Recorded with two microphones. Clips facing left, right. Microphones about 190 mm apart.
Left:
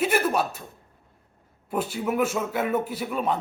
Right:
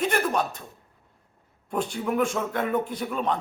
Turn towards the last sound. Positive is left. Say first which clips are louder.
# left 1 dB
turn(degrees=5)  # may be behind; listen again after turning